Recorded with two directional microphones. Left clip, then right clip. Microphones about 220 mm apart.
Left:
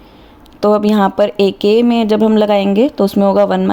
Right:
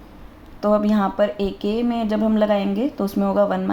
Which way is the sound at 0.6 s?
45° left (ahead or behind).